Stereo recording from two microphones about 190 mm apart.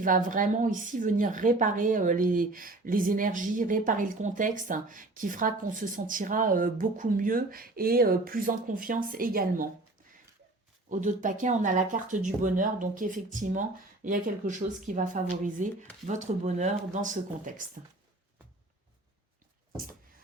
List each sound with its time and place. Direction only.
0.0 s a woman's voice: 45° right (ahead or behind)
10.8 s a woman's voice: 40° right (ahead or behind)